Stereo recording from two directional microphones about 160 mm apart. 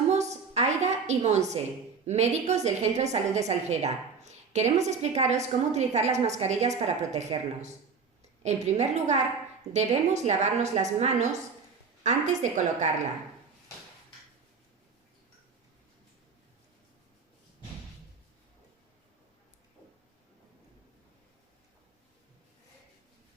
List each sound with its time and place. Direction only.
0.1 s a sound: 45° right (ahead or behind)
2.0 s a woman's voice: 45° right (ahead or behind)
10.2 s a woman's voice: 45° right (ahead or behind)